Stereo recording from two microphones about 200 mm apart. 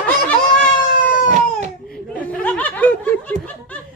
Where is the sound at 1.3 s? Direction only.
35° right (ahead or behind).